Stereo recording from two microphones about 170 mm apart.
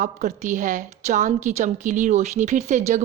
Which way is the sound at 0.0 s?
45° right (ahead or behind).